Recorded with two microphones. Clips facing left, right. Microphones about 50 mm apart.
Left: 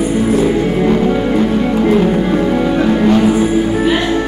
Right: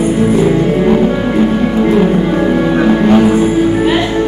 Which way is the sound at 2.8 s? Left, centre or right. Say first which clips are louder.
Right 3 dB; centre.